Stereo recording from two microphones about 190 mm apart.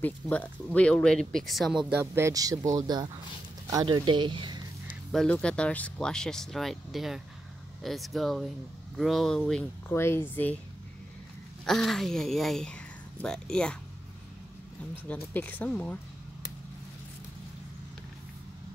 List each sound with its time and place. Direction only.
0.0 s speech: 5° left (ahead or behind)
1.9 s speech: 10° right (ahead or behind)
5.1 s speech: 5° left (ahead or behind)
11.6 s speech: centre (ahead or behind)
15.0 s speech: 10° left (ahead or behind)